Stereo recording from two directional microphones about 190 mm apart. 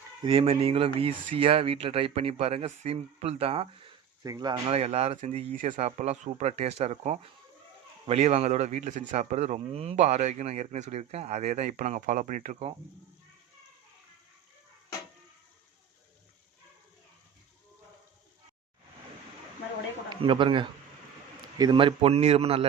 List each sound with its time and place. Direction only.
0.2 s speech: 30° right (ahead or behind)
4.2 s speech: 20° right (ahead or behind); by 12.7 s 35° right (ahead or behind)
20.1 s a man's voice: 25° right (ahead or behind)